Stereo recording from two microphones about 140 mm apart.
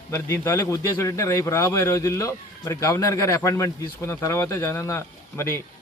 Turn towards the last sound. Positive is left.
turn(degrees=20)  # may be behind; listen again after turning